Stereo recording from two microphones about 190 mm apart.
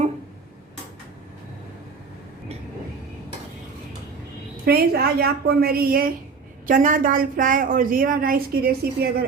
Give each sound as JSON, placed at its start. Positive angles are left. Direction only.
{"t": 4.6, "sound": "a woman's voice", "side_deg": -55}